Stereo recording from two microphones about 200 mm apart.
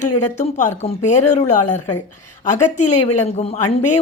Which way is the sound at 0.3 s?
35° left (ahead or behind).